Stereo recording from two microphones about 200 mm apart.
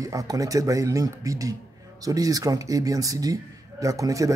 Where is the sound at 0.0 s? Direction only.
15° right (ahead or behind).